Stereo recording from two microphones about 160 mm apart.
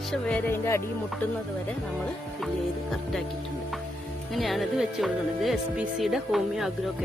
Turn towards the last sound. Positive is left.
turn(degrees=0)  # may be behind; listen again after turning